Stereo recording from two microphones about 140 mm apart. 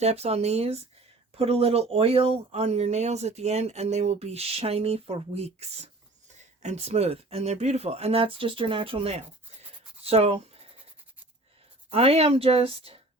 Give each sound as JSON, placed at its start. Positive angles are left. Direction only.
{"t": 0.0, "sound": "speech", "side_deg": -50}
{"t": 11.9, "sound": "speech", "side_deg": -45}